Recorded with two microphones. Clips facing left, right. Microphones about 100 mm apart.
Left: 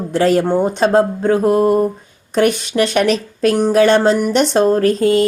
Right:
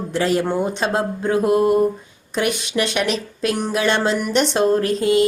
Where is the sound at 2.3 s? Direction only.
45° left (ahead or behind).